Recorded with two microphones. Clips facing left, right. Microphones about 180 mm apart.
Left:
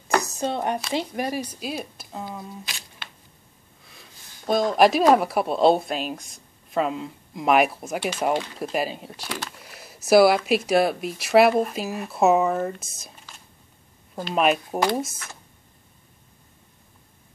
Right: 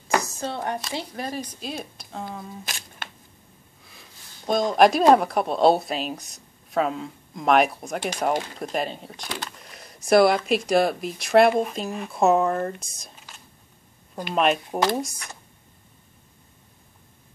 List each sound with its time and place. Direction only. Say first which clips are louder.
0.2 s a sound: left 3 dB; 20° left (ahead or behind)
0.8 s speech: left 5 dB; 20° left (ahead or behind)
2.6 s camera: right 3 dB; 50° right (ahead or behind)
3.8 s a sound: left 1 dB; centre (ahead or behind)
5.1 s speech: right 1 dB; 5° left (ahead or behind)
14.3 s speech: left 1 dB; 5° left (ahead or behind)